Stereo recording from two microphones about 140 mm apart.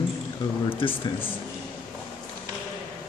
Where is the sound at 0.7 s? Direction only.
40° left (ahead or behind).